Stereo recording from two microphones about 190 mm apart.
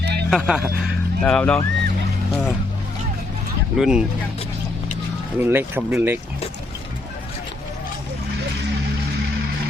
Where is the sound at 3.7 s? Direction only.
5° right (ahead or behind).